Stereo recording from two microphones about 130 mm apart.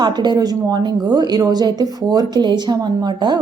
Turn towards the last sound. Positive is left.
turn(degrees=-35)  # may be behind; listen again after turning